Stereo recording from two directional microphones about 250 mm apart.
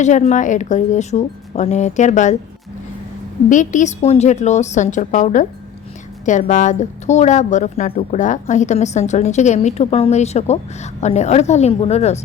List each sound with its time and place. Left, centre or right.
0.0 s a woman's voice: left
3.5 s a woman's voice: left